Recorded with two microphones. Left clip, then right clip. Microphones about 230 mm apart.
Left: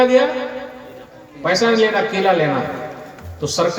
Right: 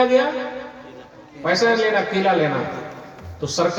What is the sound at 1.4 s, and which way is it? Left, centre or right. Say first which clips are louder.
Speech: left 2 dB; left.